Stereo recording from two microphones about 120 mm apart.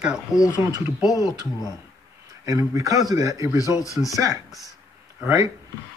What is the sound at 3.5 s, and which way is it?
Speech, 30° left (ahead or behind).